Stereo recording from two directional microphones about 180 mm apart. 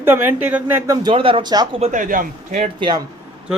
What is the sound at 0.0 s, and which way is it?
Speech, 10° right (ahead or behind).